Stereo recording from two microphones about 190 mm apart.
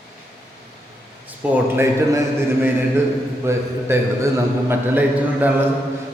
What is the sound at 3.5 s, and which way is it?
A man's voice, 15° right (ahead or behind).